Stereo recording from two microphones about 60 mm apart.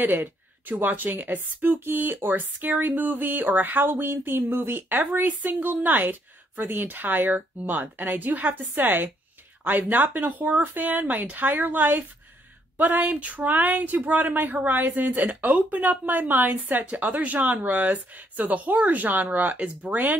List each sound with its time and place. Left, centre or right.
0.0 s speech: right